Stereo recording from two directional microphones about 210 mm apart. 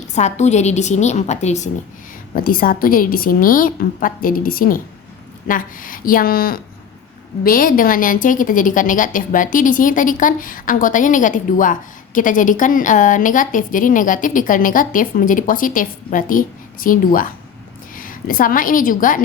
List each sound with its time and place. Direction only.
0.2 s a woman's voice: 35° left (ahead or behind)